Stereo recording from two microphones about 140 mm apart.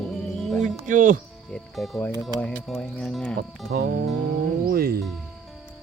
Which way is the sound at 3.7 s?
90° right.